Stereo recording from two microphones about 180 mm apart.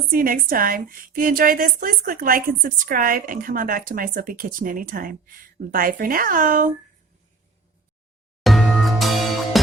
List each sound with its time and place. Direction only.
0.1 s a woman's voice: 50° right (ahead or behind)
8.4 s music: centre (ahead or behind)